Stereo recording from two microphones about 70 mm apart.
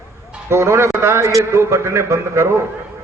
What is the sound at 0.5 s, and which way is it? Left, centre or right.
A man's voice, right.